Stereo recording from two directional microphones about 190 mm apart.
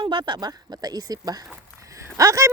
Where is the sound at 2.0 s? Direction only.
15° right (ahead or behind).